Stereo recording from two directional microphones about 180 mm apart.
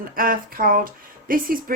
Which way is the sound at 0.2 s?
50° right (ahead or behind).